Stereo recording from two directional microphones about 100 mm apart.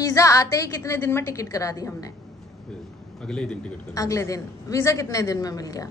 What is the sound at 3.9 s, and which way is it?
A woman's voice, 30° left (ahead or behind).